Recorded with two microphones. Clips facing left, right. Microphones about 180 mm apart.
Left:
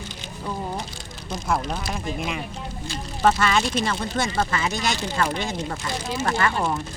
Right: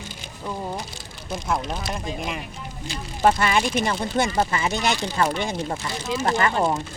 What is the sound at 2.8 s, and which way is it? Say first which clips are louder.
Speech: right 1 dB; 20° right (ahead or behind).